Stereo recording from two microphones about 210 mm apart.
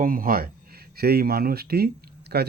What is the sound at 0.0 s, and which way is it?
Speech, 40° right (ahead or behind).